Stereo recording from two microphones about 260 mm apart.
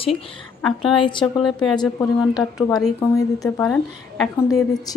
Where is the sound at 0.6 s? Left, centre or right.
Centre.